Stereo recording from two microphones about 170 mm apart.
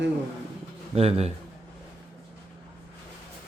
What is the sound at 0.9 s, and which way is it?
Speech, 35° right (ahead or behind).